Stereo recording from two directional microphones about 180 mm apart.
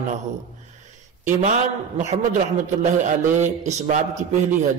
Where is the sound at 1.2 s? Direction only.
40° right (ahead or behind).